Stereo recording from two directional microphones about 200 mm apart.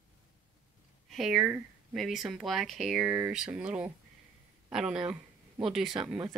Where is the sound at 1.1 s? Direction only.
Centre (ahead or behind).